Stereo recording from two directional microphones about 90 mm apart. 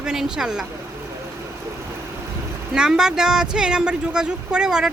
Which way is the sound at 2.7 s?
10° right (ahead or behind).